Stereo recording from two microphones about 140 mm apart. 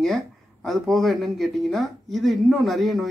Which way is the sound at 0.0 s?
Centre (ahead or behind).